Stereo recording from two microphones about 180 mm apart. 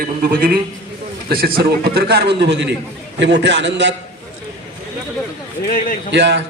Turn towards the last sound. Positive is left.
turn(degrees=-70)  # may be behind; listen again after turning